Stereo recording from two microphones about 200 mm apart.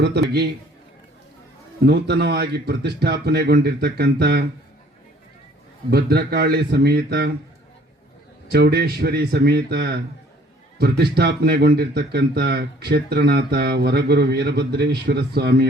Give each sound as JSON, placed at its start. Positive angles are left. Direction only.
{"t": 0.0, "sound": "a man's voice", "side_deg": -55}
{"t": 1.9, "sound": "speech", "side_deg": -55}
{"t": 5.9, "sound": "speech", "side_deg": -55}
{"t": 8.5, "sound": "speech", "side_deg": -55}